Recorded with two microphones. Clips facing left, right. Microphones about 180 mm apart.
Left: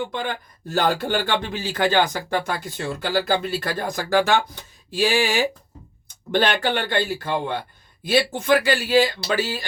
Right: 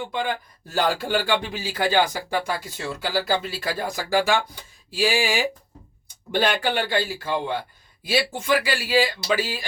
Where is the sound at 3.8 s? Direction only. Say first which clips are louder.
Left 2 dB; 10° right (ahead or behind).